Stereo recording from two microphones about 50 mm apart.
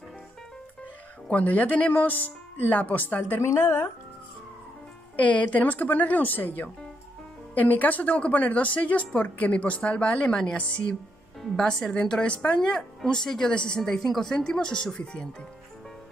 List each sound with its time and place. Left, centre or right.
1.3 s a woman's voice: left
3.5 s speech: left
5.2 s a woman's voice: left
10.2 s speech: centre
11.6 s a woman's voice: centre
12.5 s speech: centre